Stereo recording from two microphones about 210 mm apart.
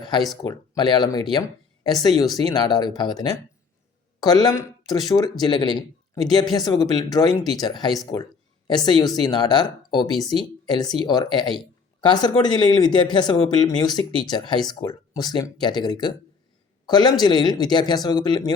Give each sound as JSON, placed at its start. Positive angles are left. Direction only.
{"t": 0.4, "sound": "a woman's voice", "side_deg": 20}